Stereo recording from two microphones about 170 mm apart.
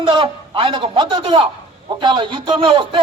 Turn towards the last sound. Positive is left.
turn(degrees=-30)  # may be behind; listen again after turning